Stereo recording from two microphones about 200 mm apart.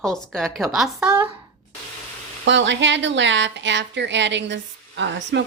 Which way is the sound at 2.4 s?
65° right (ahead or behind).